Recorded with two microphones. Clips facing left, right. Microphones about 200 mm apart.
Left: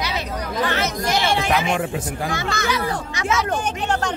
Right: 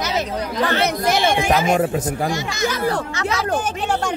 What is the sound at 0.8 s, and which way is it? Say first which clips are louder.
Speech: right 4 dB; 55° right (ahead or behind).